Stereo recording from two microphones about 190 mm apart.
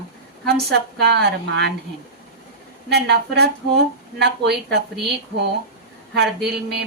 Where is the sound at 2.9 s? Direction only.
60° right (ahead or behind).